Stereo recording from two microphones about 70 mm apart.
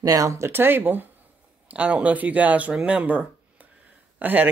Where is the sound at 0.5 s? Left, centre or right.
Right.